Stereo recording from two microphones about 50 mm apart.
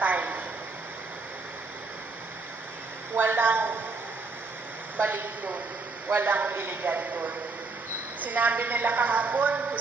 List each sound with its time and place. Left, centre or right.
0.0 s a sound: right
3.2 s a woman's voice: right
5.1 s a woman's voice: right
6.8 s a woman's voice: right